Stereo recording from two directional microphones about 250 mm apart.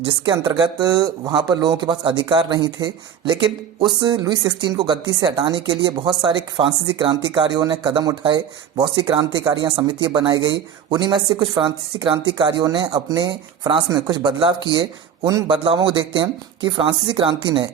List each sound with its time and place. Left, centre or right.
0.0 s a woman's voice: centre